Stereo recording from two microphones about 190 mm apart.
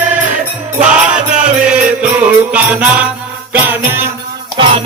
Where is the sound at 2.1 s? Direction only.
10° right (ahead or behind).